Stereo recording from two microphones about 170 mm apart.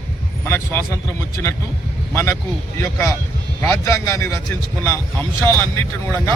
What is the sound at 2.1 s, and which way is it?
Speech, 15° left (ahead or behind).